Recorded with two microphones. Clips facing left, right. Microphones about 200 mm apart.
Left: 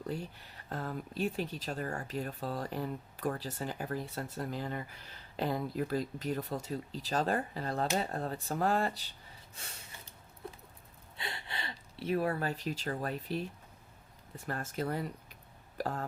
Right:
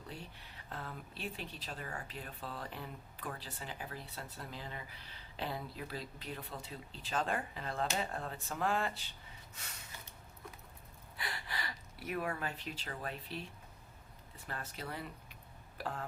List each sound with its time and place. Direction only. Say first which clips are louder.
0.1 s speech: left 10 dB; 40° left (ahead or behind)
10.4 s a sound: left 7 dB; 30° left (ahead or behind)
11.2 s speech: left 1 dB; 25° left (ahead or behind); by 16.0 s 40° left (ahead or behind)